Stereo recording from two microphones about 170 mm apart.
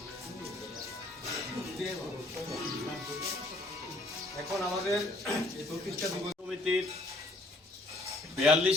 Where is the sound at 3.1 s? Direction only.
20° right (ahead or behind).